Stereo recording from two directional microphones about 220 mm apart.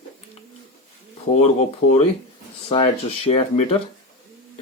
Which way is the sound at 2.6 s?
25° left (ahead or behind).